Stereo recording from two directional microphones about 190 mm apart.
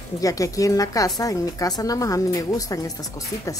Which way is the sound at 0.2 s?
20° left (ahead or behind).